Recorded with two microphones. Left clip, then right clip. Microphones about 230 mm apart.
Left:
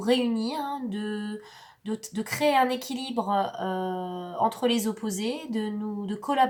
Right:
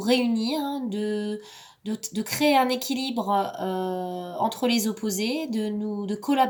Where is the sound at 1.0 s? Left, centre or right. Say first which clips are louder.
Right 6 dB; right.